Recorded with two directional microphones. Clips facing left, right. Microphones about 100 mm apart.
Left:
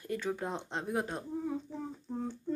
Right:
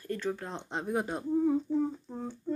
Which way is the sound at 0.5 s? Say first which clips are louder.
Right 2 dB; centre (ahead or behind).